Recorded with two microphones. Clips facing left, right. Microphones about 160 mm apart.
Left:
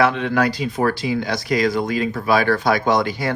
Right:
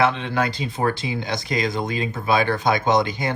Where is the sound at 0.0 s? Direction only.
25° right (ahead or behind).